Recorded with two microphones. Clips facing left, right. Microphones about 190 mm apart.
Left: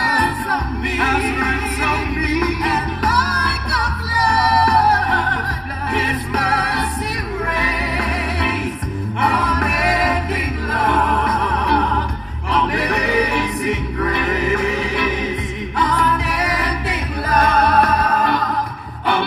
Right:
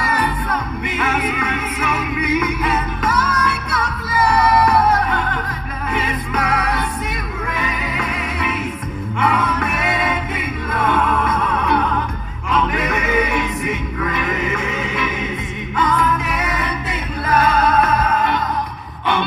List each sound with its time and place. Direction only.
1.0 s music: 25° right (ahead or behind)
17.3 s music: 40° left (ahead or behind)